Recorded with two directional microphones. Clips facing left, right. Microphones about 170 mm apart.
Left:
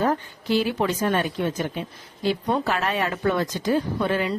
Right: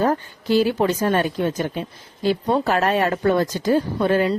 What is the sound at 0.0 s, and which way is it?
Speech, 40° right (ahead or behind).